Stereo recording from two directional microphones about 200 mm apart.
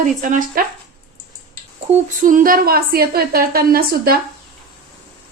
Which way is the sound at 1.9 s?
40° right (ahead or behind).